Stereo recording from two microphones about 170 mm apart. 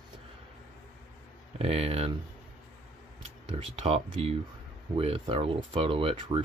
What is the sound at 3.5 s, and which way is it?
Speech, 35° right (ahead or behind).